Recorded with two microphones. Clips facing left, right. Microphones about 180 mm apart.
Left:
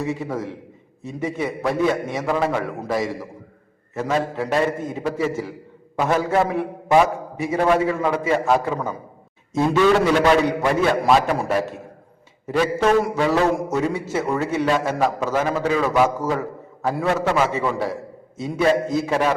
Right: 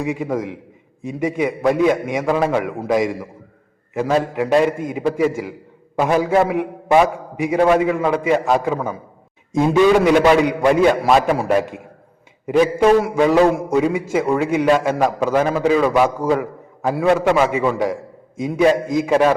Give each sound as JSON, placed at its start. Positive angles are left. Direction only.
{"t": 0.0, "sound": "a man's voice", "side_deg": -15}